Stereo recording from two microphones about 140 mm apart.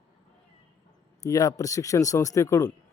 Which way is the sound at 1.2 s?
25° left (ahead or behind).